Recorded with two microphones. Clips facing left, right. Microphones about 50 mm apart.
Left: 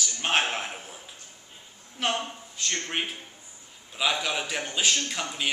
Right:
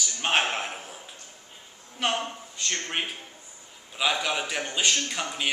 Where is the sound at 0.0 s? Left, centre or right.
Centre.